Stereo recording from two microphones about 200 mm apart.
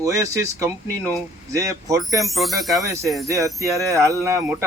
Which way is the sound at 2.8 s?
15° right (ahead or behind).